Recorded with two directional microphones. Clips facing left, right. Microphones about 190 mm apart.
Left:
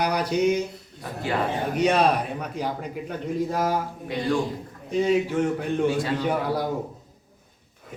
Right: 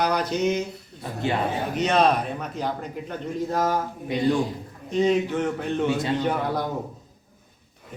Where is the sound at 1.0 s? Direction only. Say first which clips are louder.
Right 1 dB; 25° right (ahead or behind).